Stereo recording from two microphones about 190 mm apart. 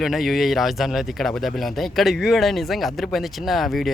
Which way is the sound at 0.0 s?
Centre (ahead or behind).